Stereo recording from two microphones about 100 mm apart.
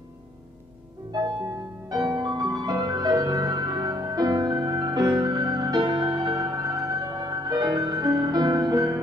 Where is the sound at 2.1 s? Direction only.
40° right (ahead or behind).